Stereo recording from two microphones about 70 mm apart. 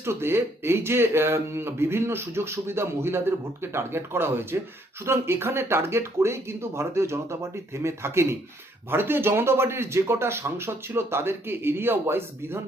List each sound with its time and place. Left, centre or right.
0.0 s speech: right